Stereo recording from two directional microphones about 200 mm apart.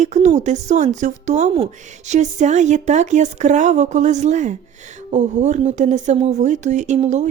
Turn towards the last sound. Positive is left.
turn(degrees=-35)  # may be behind; listen again after turning